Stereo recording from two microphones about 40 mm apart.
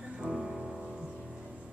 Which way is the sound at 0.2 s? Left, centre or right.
Centre.